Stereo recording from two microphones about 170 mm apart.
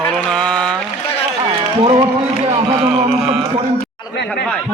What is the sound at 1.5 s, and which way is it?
Music, 35° right (ahead or behind).